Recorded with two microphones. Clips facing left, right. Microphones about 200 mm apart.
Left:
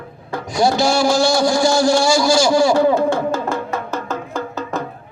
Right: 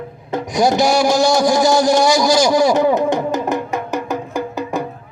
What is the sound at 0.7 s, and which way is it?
Speech, 20° right (ahead or behind).